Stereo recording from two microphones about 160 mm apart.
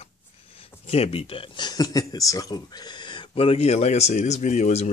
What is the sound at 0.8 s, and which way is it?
Speech, 40° left (ahead or behind).